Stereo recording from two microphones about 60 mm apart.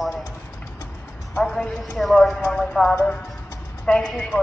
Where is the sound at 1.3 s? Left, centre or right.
Centre.